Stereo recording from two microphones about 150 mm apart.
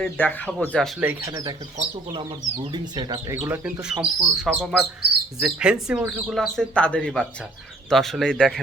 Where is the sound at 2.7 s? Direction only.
30° right (ahead or behind).